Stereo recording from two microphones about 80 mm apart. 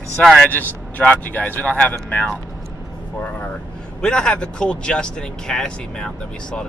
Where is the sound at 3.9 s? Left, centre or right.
Centre.